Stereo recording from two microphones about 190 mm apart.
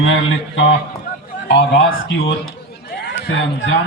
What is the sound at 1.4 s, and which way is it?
A man's voice, 65° left (ahead or behind).